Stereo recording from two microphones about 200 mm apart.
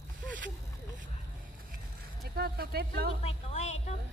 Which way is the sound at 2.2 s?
50° right (ahead or behind).